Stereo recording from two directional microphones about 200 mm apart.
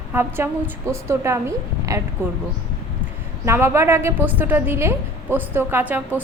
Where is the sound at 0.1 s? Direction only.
10° right (ahead or behind).